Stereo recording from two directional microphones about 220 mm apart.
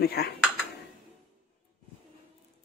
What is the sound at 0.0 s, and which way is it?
Speech, 45° left (ahead or behind).